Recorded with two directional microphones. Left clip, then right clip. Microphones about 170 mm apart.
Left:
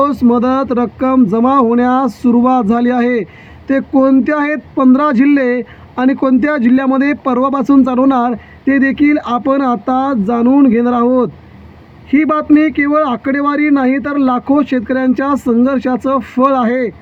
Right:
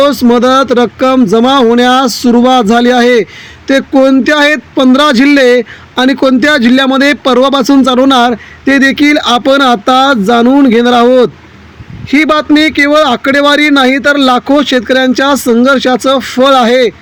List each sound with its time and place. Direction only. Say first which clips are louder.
0.3 s speech: right 7 dB; 35° right (ahead or behind)